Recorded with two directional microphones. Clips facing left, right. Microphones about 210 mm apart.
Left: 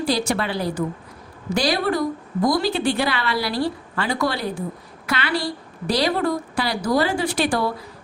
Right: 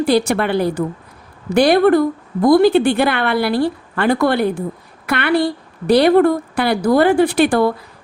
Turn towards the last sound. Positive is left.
turn(degrees=-55)  # may be behind; listen again after turning